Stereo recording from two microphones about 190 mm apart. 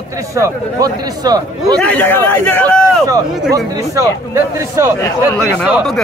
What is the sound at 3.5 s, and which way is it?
Speech, 15° right (ahead or behind).